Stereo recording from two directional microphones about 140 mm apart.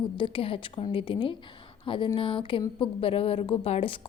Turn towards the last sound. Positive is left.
turn(degrees=40)  # may be behind; listen again after turning